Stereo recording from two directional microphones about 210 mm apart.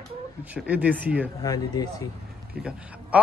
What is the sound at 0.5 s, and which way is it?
Speech, 5° right (ahead or behind).